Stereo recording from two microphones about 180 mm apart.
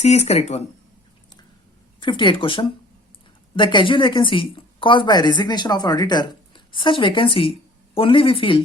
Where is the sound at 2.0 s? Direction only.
25° left (ahead or behind).